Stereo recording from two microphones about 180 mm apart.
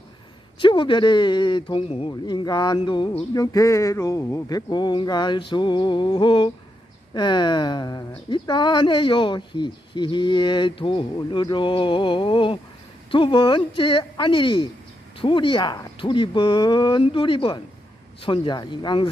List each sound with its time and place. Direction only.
0.6 s speech: 25° left (ahead or behind)
3.3 s speech: 20° left (ahead or behind)